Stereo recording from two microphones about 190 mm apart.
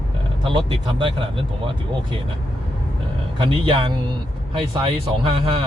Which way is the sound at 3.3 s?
25° right (ahead or behind).